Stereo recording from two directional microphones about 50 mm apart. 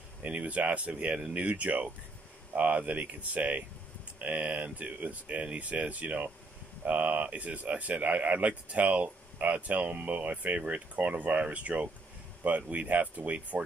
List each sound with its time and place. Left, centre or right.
0.2 s speech: right